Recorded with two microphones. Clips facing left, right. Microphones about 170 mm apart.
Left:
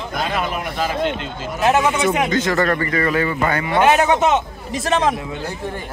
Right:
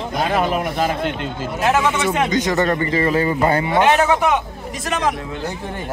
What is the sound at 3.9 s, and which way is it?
A man's voice, 20° left (ahead or behind).